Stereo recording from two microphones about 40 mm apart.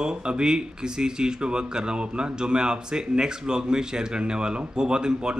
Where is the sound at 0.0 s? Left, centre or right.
Right.